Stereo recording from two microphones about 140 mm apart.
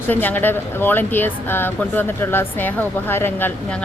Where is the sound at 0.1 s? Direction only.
10° left (ahead or behind).